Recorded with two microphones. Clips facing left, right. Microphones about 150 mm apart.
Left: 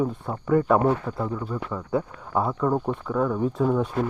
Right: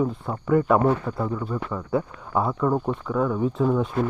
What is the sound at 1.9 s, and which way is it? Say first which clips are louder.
Speech: right 1 dB; 35° left (ahead or behind).